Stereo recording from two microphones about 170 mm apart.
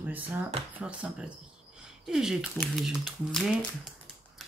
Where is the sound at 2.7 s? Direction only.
Centre (ahead or behind).